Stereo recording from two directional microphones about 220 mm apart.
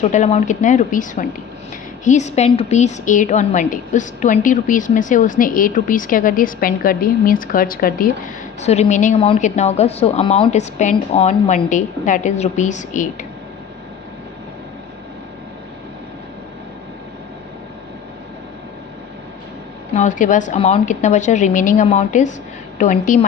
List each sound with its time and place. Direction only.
0.1 s a woman's voice: 30° left (ahead or behind)
8.6 s a woman's voice: 30° left (ahead or behind)
20.0 s a woman's voice: 35° left (ahead or behind)